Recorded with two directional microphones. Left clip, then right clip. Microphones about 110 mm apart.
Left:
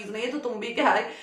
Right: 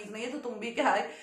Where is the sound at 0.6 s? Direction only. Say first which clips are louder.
Left 5 dB; 15° left (ahead or behind).